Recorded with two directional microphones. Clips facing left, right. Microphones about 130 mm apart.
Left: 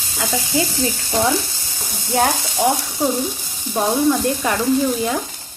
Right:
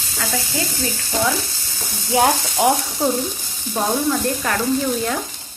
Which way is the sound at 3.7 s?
10° left (ahead or behind).